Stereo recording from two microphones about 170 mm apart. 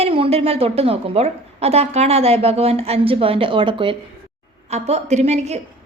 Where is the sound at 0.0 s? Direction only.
35° right (ahead or behind).